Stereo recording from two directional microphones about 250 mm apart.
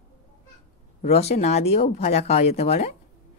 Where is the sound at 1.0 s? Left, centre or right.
Left.